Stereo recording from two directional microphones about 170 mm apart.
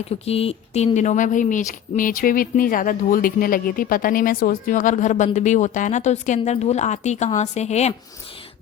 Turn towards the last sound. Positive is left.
turn(degrees=40)  # may be behind; listen again after turning